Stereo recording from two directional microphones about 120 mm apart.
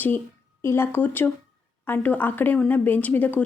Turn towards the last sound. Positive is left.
turn(degrees=15)  # may be behind; listen again after turning